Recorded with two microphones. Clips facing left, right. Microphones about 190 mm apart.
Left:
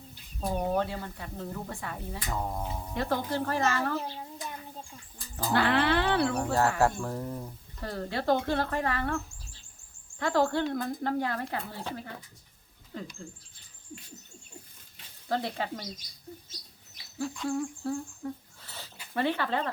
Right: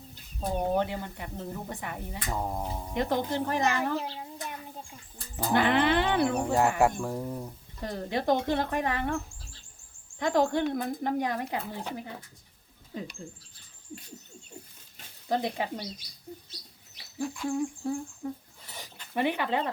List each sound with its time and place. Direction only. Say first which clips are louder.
0.5 s speech: right 1 dB; 20° right (ahead or behind)
5.4 s speech: right 2 dB; 20° right (ahead or behind)
15.3 s speech: right 2 dB; 15° right (ahead or behind)
17.2 s speech: right 1 dB; 10° right (ahead or behind)
17.6 s humming: right 2 dB; 15° right (ahead or behind)
19.1 s speech: right 1 dB; 15° right (ahead or behind)